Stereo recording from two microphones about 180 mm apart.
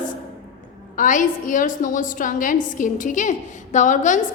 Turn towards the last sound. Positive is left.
turn(degrees=45)  # may be behind; listen again after turning